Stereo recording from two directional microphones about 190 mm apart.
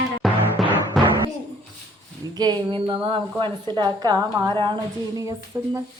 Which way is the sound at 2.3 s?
20° right (ahead or behind).